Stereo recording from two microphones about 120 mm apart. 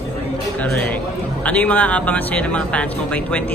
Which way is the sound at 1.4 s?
10° left (ahead or behind).